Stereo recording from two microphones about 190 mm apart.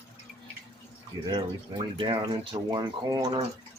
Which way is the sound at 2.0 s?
25° right (ahead or behind).